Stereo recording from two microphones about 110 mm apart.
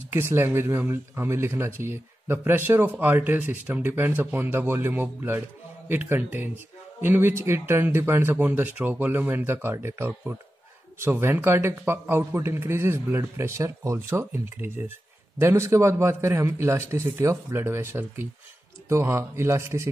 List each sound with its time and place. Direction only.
0.1 s speech: 20° right (ahead or behind)